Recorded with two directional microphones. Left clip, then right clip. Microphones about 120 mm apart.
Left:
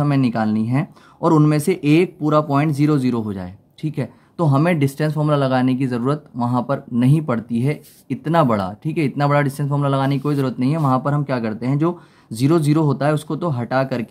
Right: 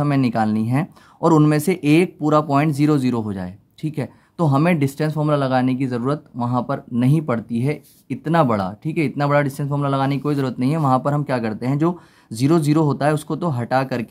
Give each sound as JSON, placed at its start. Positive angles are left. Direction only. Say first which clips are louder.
{"t": 0.0, "sound": "speech", "louder": "even", "side_deg": -30}